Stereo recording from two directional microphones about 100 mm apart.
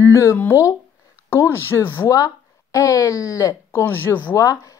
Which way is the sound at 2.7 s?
35° left (ahead or behind).